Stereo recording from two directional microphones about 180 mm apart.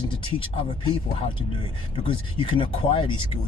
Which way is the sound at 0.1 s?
25° left (ahead or behind).